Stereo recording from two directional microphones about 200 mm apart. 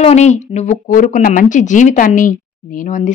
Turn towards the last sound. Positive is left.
turn(degrees=40)  # may be behind; listen again after turning